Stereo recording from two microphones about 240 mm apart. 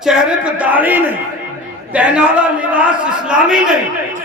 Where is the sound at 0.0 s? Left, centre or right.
Centre.